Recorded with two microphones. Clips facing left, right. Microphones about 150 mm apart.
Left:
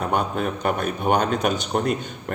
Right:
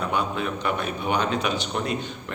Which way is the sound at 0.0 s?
45° left (ahead or behind).